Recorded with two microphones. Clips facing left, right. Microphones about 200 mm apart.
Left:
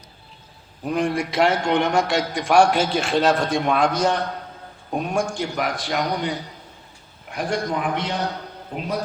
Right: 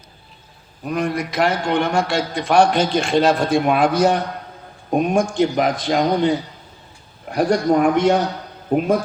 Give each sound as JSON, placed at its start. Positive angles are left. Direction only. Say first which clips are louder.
{"t": 0.9, "sound": "a man's voice", "louder": "even", "side_deg": 30}
{"t": 4.9, "sound": "speech", "louder": "right 6 dB", "side_deg": -20}
{"t": 7.3, "sound": "speech", "louder": "right 8 dB", "side_deg": -40}